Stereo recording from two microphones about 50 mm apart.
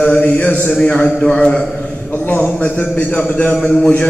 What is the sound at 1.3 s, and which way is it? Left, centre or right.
Speech, left.